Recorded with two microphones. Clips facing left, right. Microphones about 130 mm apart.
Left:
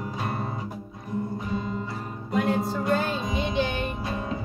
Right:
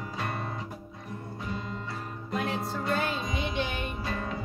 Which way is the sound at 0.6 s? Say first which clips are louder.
Left 4 dB; 10° left (ahead or behind).